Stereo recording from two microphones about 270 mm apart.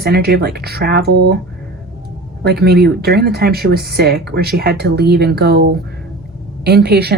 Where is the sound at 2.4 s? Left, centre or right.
Right.